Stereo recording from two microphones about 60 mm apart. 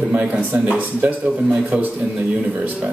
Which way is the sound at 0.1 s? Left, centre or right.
Right.